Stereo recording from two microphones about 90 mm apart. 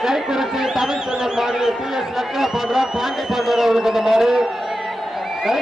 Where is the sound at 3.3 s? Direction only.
5° right (ahead or behind).